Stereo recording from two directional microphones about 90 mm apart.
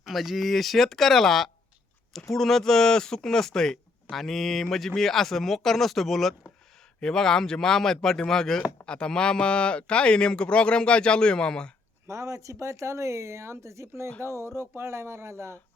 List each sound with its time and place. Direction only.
0.1 s a man's voice: centre (ahead or behind)
12.0 s speech: 35° right (ahead or behind)